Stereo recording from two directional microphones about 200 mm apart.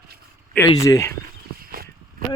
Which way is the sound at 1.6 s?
45° right (ahead or behind).